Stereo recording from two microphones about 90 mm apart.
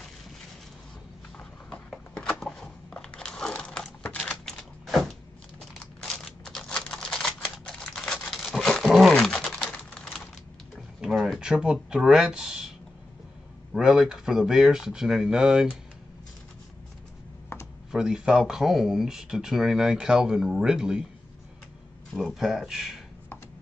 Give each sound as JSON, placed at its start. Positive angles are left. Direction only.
{"t": 1.7, "sound": "a sound", "side_deg": 10}
{"t": 6.1, "sound": "typewriter", "side_deg": 5}
{"t": 9.9, "sound": "typing", "side_deg": 5}
{"t": 11.0, "sound": "a sound", "side_deg": 0}
{"t": 13.7, "sound": "speech", "side_deg": -5}
{"t": 17.5, "sound": "computer keyboard", "side_deg": 30}
{"t": 17.9, "sound": "speech", "side_deg": -5}
{"t": 22.1, "sound": "speech", "side_deg": 0}